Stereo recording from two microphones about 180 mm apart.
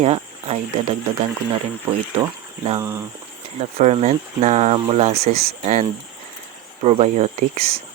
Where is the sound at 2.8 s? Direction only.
15° right (ahead or behind).